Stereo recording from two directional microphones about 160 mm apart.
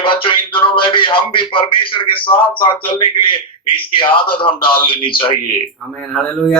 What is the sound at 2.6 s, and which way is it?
A man's voice, 35° left (ahead or behind).